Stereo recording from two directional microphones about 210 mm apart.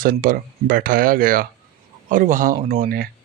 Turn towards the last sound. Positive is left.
turn(degrees=-45)  # may be behind; listen again after turning